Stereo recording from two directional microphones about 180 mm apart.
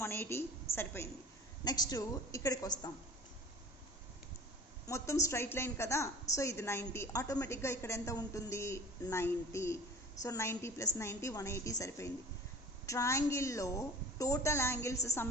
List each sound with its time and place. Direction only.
0.0 s a sound: 15° left (ahead or behind)
0.7 s a woman's voice: 30° left (ahead or behind)
1.6 s a woman's voice: 20° left (ahead or behind)
4.9 s a woman's voice: 15° left (ahead or behind)